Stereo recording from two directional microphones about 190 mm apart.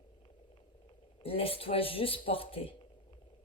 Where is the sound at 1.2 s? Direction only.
30° left (ahead or behind).